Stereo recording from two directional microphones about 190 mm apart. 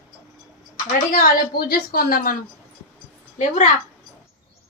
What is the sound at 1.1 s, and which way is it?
A woman's voice, 50° left (ahead or behind).